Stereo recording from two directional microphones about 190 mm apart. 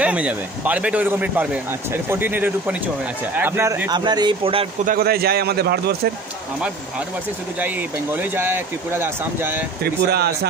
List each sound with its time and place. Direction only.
0.0 s speech: 5° right (ahead or behind)
3.9 s speech: 20° right (ahead or behind)
4.8 s a man's voice: 55° right (ahead or behind)
7.6 s speech: 10° right (ahead or behind)
10.0 s a man's voice: 60° right (ahead or behind)